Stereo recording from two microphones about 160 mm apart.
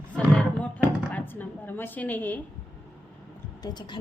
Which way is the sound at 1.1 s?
10° left (ahead or behind).